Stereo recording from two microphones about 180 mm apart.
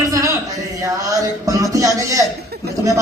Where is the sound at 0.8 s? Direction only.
20° right (ahead or behind).